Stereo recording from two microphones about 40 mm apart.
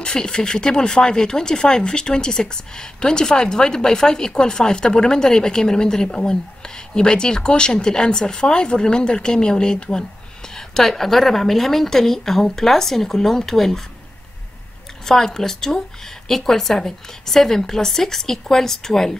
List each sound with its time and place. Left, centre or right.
0.0 s speech: centre
10.7 s speech: centre
15.0 s speech: centre